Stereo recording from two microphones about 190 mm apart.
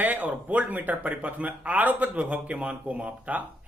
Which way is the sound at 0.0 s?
10° right (ahead or behind).